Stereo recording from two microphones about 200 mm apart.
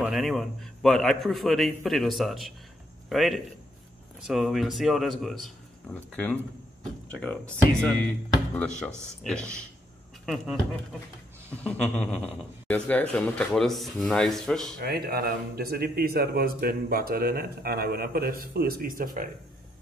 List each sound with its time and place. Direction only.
0.0 s a man's voice: centre (ahead or behind)
8.5 s a man's voice: 5° left (ahead or behind)
11.5 s a sound: 5° left (ahead or behind)
12.6 s a man's voice: 5° left (ahead or behind)
14.8 s speech: 50° right (ahead or behind)